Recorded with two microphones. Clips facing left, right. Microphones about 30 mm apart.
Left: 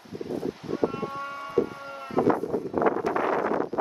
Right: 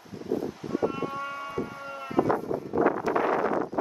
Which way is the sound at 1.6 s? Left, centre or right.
Centre.